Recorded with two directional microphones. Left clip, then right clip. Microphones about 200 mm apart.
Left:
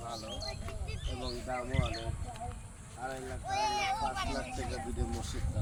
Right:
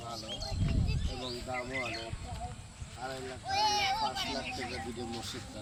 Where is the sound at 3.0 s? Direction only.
Centre (ahead or behind).